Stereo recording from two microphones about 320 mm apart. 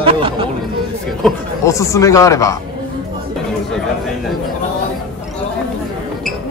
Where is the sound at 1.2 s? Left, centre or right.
Centre.